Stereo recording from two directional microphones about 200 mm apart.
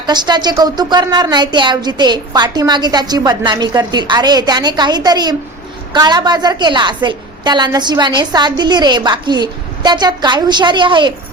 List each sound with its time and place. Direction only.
0.0 s speech: 20° right (ahead or behind)